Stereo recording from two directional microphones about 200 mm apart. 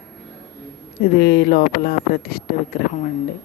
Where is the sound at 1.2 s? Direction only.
50° left (ahead or behind).